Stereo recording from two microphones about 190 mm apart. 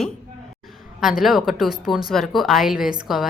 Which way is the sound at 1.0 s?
Centre (ahead or behind).